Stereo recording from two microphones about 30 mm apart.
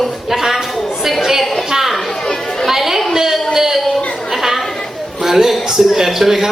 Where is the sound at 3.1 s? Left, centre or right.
Centre.